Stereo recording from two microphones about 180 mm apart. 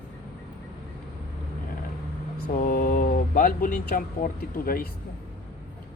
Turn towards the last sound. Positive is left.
turn(degrees=50)  # may be behind; listen again after turning